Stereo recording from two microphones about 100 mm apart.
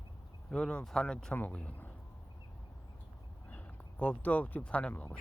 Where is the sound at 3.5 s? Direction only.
15° left (ahead or behind).